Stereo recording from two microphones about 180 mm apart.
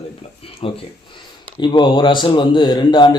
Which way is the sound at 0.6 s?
30° left (ahead or behind).